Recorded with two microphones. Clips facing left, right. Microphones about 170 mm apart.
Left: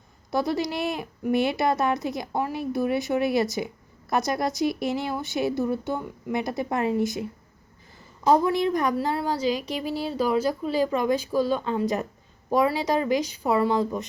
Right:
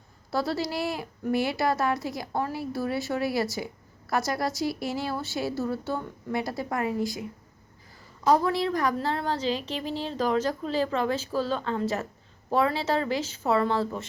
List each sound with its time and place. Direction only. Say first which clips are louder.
0.3 s a woman's voice: left 3 dB; 20° left (ahead or behind)